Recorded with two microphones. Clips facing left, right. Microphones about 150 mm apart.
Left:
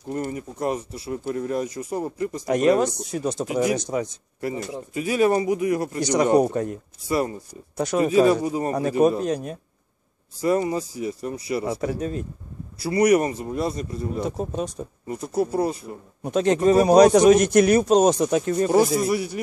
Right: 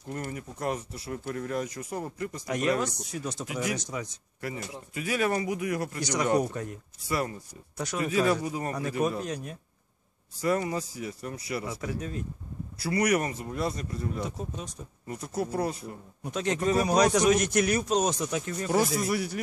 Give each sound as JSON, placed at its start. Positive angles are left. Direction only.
{"t": 0.1, "sound": "speech", "side_deg": 25}
{"t": 6.4, "sound": "speech", "side_deg": 45}
{"t": 7.1, "sound": "speech", "side_deg": 25}
{"t": 11.6, "sound": "speech", "side_deg": 40}
{"t": 12.9, "sound": "speech", "side_deg": 25}
{"t": 14.3, "sound": "speech", "side_deg": 50}
{"t": 15.0, "sound": "speech", "side_deg": 25}